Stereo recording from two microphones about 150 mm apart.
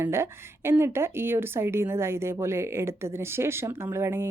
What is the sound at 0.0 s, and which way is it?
A woman's voice, 15° right (ahead or behind).